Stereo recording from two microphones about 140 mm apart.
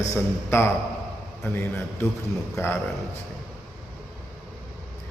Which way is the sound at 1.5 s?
15° left (ahead or behind).